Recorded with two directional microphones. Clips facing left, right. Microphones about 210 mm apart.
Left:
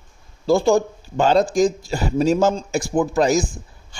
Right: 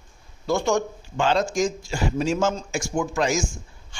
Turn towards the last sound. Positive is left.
turn(degrees=35)  # may be behind; listen again after turning